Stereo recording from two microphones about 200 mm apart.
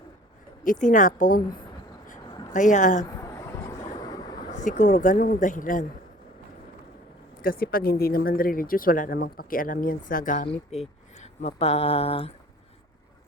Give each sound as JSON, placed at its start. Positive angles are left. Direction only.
{"t": 0.6, "sound": "speech", "side_deg": 40}
{"t": 2.5, "sound": "speech", "side_deg": 40}
{"t": 3.2, "sound": "vehicle", "side_deg": 15}
{"t": 4.5, "sound": "speech", "side_deg": 40}
{"t": 7.4, "sound": "speech", "side_deg": 45}